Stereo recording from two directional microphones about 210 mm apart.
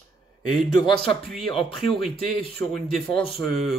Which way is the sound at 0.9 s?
Centre (ahead or behind).